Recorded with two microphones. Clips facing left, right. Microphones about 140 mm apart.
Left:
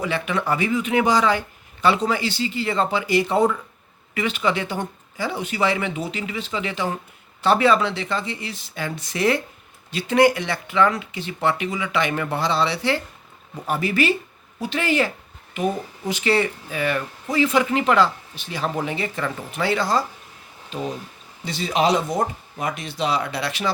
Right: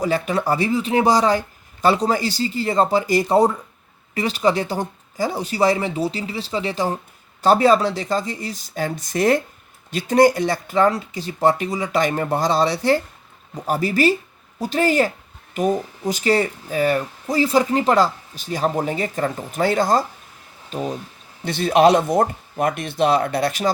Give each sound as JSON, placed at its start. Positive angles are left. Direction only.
{"t": 0.0, "sound": "speech", "side_deg": -40}
{"t": 21.4, "sound": "speech", "side_deg": -55}